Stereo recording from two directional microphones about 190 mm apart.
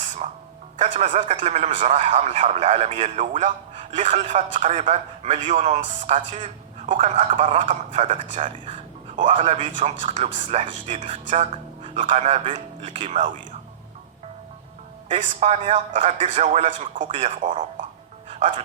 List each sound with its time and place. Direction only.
0.0 s music: 40° right (ahead or behind)
0.9 s speech: 40° right (ahead or behind)
8.6 s a sound: 25° right (ahead or behind)
9.2 s speech: 40° right (ahead or behind)
15.1 s speech: 40° right (ahead or behind)
18.3 s music: 40° right (ahead or behind)